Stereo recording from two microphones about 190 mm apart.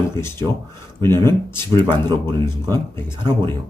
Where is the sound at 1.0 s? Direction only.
15° left (ahead or behind).